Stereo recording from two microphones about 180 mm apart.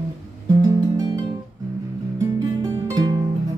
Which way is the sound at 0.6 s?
20° right (ahead or behind).